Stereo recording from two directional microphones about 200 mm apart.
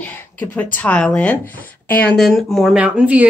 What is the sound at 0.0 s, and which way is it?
A woman's voice, 10° left (ahead or behind).